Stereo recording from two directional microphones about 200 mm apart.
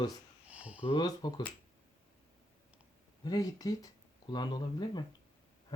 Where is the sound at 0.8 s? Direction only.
25° left (ahead or behind).